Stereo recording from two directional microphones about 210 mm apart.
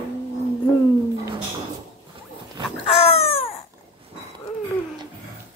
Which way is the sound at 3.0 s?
30° left (ahead or behind).